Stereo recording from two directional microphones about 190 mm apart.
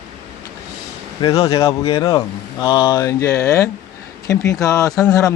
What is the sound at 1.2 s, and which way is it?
Speech, 20° left (ahead or behind).